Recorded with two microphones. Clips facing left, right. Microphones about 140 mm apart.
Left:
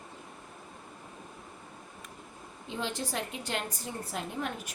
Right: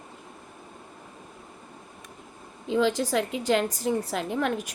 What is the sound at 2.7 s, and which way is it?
A woman's voice, 90° right.